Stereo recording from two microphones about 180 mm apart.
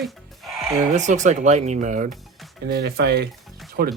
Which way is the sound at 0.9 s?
40° right (ahead or behind).